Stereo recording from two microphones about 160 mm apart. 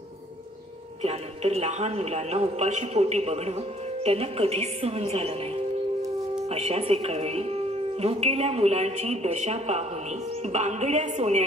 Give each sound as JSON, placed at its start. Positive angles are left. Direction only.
{"t": 1.0, "sound": "a woman's voice", "side_deg": -40}